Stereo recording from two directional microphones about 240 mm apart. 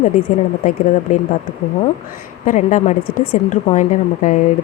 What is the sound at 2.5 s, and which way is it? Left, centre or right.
Speech, left.